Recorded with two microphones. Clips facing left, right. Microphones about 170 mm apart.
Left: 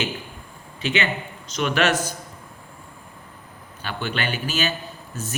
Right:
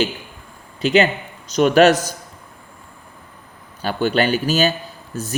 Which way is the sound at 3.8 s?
40° right (ahead or behind).